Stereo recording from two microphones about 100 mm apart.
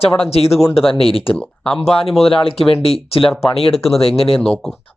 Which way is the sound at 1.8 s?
85° left.